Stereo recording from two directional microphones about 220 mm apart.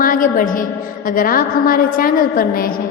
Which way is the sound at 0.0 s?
40° left (ahead or behind).